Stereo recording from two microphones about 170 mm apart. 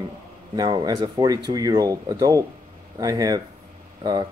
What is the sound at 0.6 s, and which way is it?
Speech, 25° right (ahead or behind).